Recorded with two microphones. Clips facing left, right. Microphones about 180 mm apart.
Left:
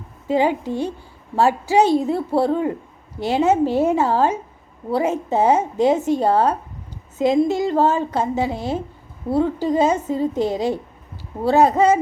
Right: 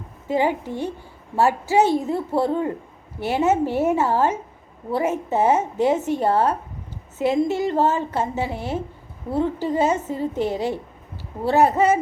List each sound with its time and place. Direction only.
0.3 s a woman's voice: 15° left (ahead or behind)